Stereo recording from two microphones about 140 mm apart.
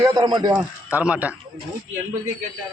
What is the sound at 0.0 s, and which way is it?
Speech, 30° right (ahead or behind).